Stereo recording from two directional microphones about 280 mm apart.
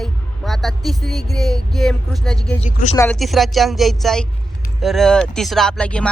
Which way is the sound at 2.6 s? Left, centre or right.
Left.